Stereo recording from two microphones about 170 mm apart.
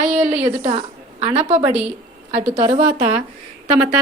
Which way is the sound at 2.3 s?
40° right (ahead or behind).